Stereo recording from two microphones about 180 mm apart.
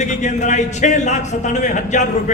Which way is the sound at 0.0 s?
40° left (ahead or behind).